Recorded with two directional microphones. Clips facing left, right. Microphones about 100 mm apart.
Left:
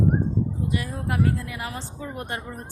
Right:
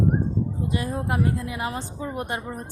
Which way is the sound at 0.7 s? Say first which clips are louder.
Right 3 dB; 25° right (ahead or behind).